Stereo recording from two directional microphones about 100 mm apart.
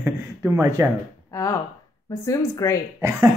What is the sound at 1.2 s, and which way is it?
Speech, 35° left (ahead or behind).